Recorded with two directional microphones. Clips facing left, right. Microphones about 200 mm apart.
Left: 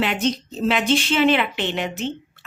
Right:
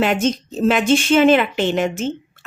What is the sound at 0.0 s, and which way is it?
A woman's voice, 45° right (ahead or behind).